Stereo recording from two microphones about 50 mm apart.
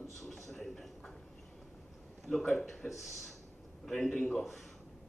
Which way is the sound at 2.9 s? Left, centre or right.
Centre.